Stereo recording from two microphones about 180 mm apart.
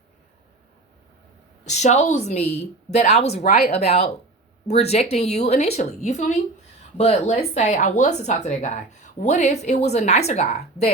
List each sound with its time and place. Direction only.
1.6 s speech: 40° left (ahead or behind)